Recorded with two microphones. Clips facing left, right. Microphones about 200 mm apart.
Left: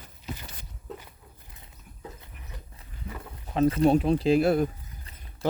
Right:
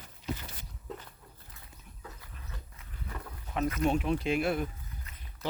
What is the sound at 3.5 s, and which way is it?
Speech, 30° left (ahead or behind).